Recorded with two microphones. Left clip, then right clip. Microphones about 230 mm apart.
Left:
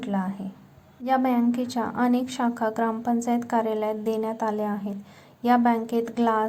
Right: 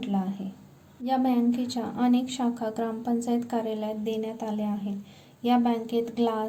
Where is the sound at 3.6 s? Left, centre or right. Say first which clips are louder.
Left 5 dB; left.